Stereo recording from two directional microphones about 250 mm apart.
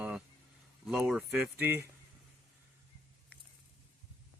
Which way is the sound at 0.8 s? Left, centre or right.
Centre.